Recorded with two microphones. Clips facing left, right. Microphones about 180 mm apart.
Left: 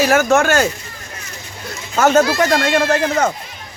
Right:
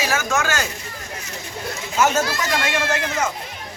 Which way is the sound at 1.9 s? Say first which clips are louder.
Left 7 dB; 60° left (ahead or behind).